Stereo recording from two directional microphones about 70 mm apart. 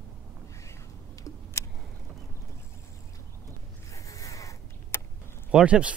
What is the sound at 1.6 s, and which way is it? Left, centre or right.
Vehicle, left.